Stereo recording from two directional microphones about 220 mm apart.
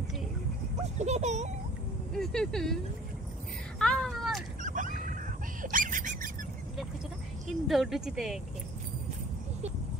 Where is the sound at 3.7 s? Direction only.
5° left (ahead or behind).